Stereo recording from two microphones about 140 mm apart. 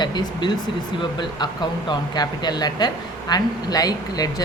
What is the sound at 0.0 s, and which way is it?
Speech, 30° left (ahead or behind).